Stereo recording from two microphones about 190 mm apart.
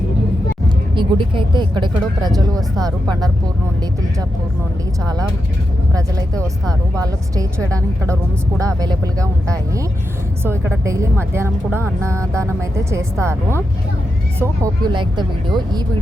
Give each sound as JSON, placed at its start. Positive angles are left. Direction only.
{"t": 0.9, "sound": "speech", "side_deg": -25}
{"t": 5.9, "sound": "speech", "side_deg": -15}
{"t": 10.4, "sound": "speech", "side_deg": -10}